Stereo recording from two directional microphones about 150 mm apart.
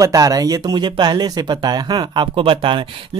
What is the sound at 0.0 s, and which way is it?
Speech, 25° right (ahead or behind).